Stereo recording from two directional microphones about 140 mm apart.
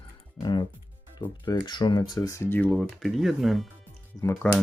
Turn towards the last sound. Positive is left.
turn(degrees=15)  # may be behind; listen again after turning